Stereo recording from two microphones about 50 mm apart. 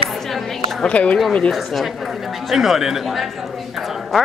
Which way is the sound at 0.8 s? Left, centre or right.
Left.